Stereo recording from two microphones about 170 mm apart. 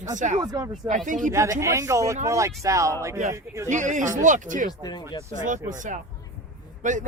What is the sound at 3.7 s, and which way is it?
Speech, 45° right (ahead or behind).